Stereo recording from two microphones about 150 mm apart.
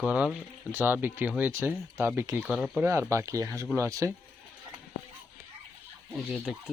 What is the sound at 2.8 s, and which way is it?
Speech, 15° right (ahead or behind).